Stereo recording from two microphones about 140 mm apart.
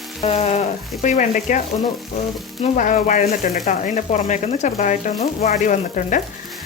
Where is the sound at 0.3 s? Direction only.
50° left (ahead or behind).